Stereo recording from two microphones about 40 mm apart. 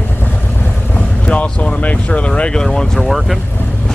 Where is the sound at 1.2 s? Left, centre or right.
Left.